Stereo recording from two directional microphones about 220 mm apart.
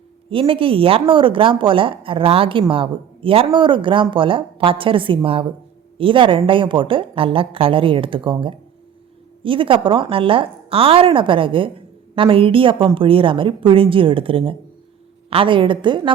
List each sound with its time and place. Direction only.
0.3 s speech: 25° right (ahead or behind)